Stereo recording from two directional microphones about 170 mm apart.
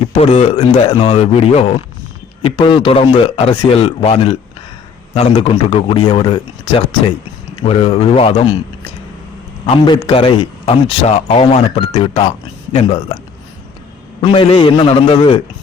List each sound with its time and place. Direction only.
0.1 s a man's voice: 40° left (ahead or behind)
9.6 s a man's voice: 30° left (ahead or behind)
14.2 s a man's voice: 30° left (ahead or behind)